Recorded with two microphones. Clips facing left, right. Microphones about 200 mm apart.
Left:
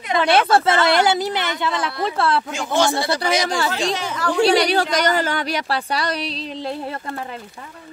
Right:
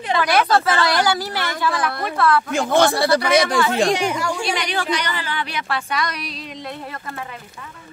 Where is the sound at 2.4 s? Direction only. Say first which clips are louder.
Right 3 dB; 55° right (ahead or behind).